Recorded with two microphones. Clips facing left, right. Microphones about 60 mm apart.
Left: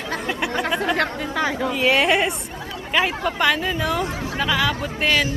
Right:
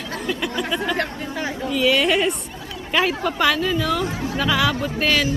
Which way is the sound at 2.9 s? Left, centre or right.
Centre.